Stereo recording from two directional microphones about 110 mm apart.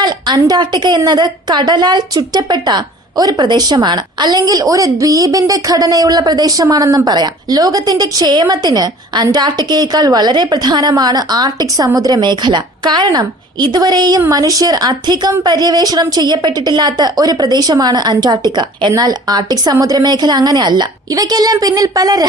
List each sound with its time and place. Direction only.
0.0 s a woman's voice: 40° right (ahead or behind)